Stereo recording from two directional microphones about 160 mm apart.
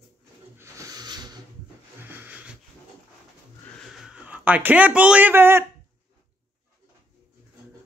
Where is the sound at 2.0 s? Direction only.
10° right (ahead or behind).